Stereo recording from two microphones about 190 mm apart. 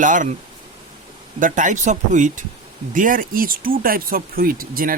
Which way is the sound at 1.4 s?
40° right (ahead or behind).